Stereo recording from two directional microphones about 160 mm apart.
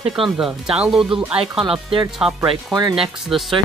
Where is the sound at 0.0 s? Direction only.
Centre (ahead or behind).